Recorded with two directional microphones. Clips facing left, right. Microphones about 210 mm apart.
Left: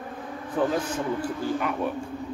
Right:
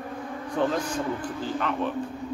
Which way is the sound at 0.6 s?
5° left (ahead or behind).